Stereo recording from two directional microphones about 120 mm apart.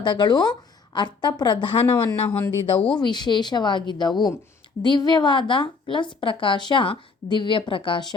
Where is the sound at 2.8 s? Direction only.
10° left (ahead or behind).